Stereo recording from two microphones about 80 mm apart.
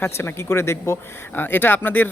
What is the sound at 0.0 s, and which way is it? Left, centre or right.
Speech, left.